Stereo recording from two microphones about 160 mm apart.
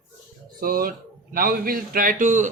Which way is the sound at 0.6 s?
65° right (ahead or behind).